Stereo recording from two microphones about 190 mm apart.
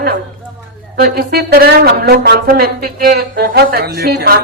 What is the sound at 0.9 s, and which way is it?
Speech, 50° right (ahead or behind).